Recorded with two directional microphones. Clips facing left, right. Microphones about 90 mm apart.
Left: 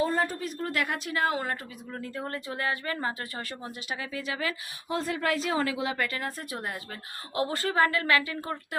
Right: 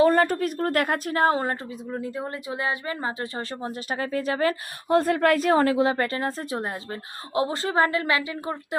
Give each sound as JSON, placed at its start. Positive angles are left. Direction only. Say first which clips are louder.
{"t": 0.0, "sound": "a woman's voice", "louder": "right 8 dB", "side_deg": -65}
{"t": 1.9, "sound": "speech", "louder": "right 4 dB", "side_deg": -15}